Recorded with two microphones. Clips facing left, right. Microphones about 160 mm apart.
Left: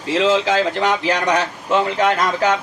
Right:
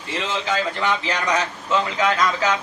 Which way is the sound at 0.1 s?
90° left.